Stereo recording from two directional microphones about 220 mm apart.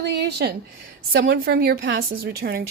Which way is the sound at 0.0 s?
50° right (ahead or behind).